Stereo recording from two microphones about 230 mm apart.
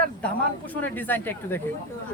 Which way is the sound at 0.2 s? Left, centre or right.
Centre.